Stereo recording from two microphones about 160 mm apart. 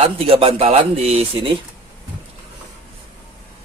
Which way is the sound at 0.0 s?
35° right (ahead or behind).